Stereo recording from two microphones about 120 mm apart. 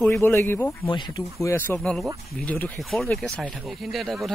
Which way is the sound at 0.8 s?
40° left (ahead or behind).